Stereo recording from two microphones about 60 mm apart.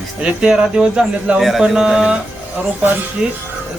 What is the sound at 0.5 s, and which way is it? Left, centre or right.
Speech, centre.